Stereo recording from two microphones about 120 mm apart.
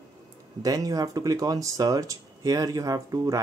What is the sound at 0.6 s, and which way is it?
Speech, 30° right (ahead or behind).